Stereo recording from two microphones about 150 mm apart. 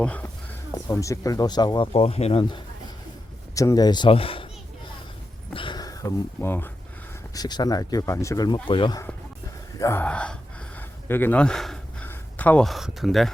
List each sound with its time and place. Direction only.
0.0 s speech: 10° left (ahead or behind)
0.7 s speech: 20° left (ahead or behind)
1.9 s speech: 40° left (ahead or behind)
3.5 s speech: 20° left (ahead or behind); by 4.4 s 40° left (ahead or behind)
5.5 s a sound: 30° left (ahead or behind); by 6.7 s 15° left (ahead or behind)
7.3 s speech: 25° left (ahead or behind)
9.7 s speech: 20° left (ahead or behind)
10.0 s speech: 10° left (ahead or behind)
10.8 s a sound: 15° left (ahead or behind)
12.0 s speech: 10° left (ahead or behind)